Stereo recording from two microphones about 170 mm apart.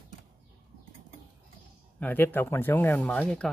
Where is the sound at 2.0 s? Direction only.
10° left (ahead or behind).